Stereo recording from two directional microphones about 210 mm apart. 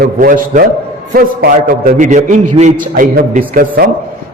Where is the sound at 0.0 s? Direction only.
40° right (ahead or behind).